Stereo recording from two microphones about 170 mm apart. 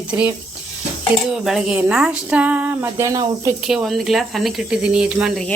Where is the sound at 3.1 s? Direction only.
25° right (ahead or behind).